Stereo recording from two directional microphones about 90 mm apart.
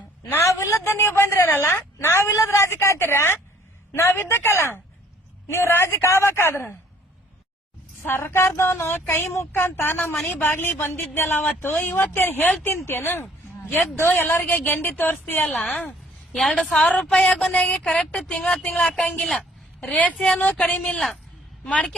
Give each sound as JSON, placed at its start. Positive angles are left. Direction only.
{"t": 0.3, "sound": "a woman's voice", "side_deg": 30}
{"t": 8.0, "sound": "a woman's voice", "side_deg": 25}
{"t": 16.3, "sound": "a woman's voice", "side_deg": 0}